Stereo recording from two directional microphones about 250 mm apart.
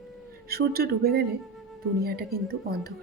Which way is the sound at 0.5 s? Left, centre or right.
Right.